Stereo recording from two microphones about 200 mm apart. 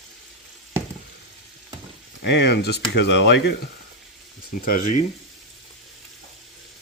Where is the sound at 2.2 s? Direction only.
60° left (ahead or behind).